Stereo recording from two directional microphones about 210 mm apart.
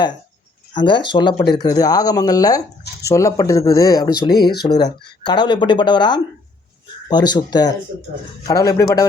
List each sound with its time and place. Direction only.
0.7 s speech: 20° left (ahead or behind)